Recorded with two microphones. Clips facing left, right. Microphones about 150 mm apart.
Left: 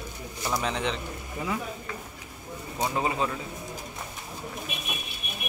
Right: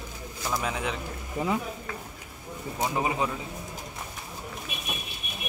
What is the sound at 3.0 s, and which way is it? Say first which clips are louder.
Speech: even; 15° right (ahead or behind).